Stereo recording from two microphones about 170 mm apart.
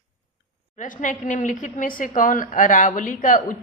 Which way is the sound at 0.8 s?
50° left (ahead or behind).